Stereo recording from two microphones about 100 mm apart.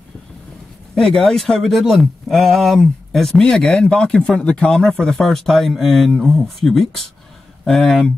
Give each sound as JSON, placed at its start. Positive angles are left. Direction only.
{"t": 0.9, "sound": "speech", "side_deg": 5}